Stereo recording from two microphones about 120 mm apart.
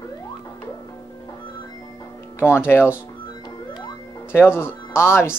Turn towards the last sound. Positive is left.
turn(degrees=20)  # may be behind; listen again after turning